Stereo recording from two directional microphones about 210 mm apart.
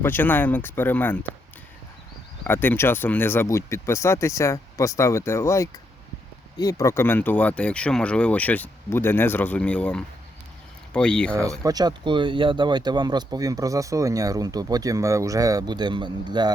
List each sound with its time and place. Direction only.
0.0 s speech: 10° left (ahead or behind)
2.4 s speech: 10° left (ahead or behind)
11.6 s speech: 20° right (ahead or behind)